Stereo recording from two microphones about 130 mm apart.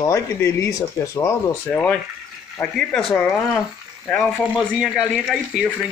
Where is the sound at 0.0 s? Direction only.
20° left (ahead or behind).